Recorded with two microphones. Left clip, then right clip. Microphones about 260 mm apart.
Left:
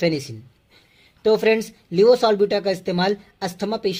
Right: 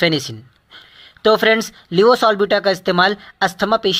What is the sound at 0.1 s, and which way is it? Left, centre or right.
Speech, centre.